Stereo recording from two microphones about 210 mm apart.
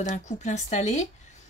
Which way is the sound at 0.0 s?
35° left (ahead or behind).